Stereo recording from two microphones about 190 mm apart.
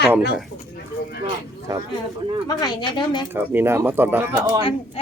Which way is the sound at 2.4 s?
20° left (ahead or behind).